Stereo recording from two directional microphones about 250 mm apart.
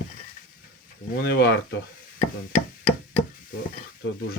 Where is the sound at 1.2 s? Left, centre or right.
Left.